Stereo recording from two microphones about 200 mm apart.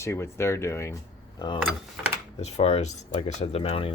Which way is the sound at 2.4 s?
30° left (ahead or behind).